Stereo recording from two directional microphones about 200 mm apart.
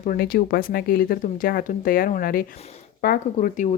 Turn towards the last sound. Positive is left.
turn(degrees=40)  # may be behind; listen again after turning